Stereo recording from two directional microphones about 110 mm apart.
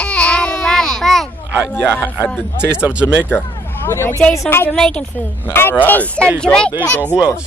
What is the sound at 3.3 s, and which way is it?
Vehicle, 20° left (ahead or behind).